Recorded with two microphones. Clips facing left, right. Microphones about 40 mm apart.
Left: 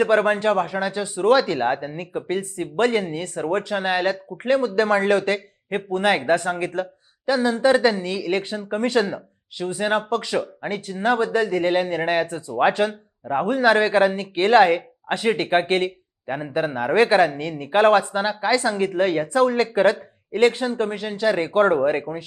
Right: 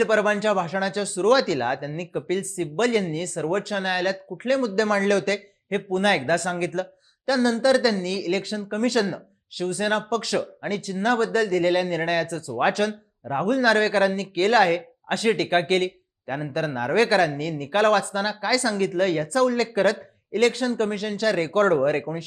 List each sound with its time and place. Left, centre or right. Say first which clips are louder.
0.0 s a man's voice: left 2 dB; centre
15.0 s a man's voice: even; centre